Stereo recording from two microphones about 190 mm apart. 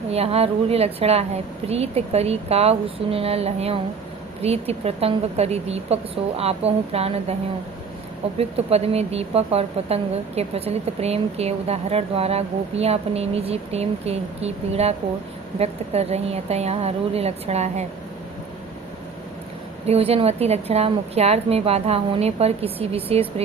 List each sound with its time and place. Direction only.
0.1 s speech: 35° right (ahead or behind)
8.4 s speech: 30° right (ahead or behind)
19.8 s speech: 30° right (ahead or behind)